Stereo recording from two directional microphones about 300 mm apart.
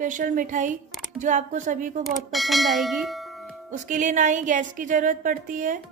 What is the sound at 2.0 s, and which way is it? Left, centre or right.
Speech, centre.